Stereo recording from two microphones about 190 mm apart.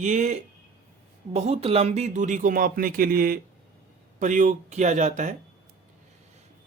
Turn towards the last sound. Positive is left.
turn(degrees=-40)  # may be behind; listen again after turning